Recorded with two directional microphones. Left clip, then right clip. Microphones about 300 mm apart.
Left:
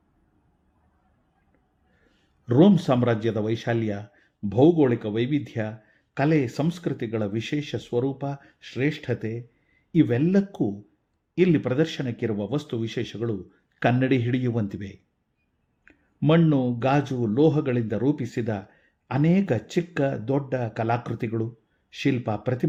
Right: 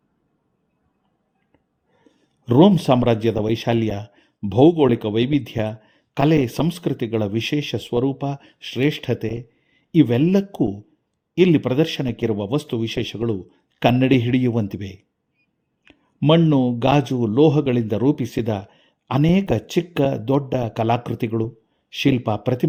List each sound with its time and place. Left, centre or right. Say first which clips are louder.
2.4 s a man's voice: right 4 dB; right